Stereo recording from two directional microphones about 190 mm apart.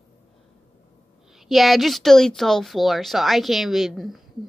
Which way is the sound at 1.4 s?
Centre (ahead or behind).